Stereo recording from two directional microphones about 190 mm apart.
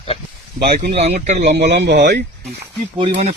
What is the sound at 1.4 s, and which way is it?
Speech, 60° right (ahead or behind).